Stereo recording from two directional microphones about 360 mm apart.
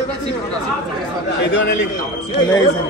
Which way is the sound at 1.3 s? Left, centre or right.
Left.